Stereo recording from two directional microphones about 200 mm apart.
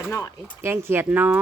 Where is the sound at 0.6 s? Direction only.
10° right (ahead or behind).